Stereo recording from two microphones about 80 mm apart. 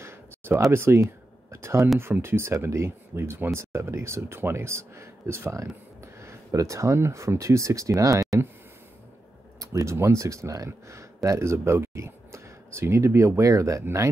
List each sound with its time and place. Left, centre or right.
0.7 s speech: right
9.6 s speech: right